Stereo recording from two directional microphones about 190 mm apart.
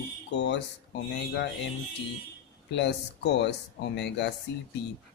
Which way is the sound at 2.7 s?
65° left (ahead or behind).